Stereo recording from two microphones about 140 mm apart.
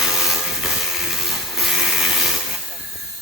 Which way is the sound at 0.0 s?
5° right (ahead or behind).